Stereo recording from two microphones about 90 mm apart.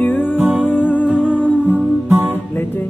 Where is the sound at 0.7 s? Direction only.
20° left (ahead or behind).